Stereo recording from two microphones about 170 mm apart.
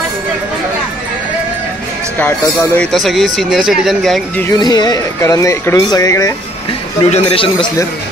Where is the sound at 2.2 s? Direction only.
10° left (ahead or behind).